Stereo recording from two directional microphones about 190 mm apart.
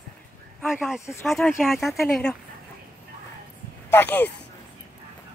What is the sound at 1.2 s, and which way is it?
Speech, centre (ahead or behind).